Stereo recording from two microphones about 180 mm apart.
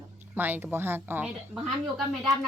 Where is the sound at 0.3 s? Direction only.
10° right (ahead or behind).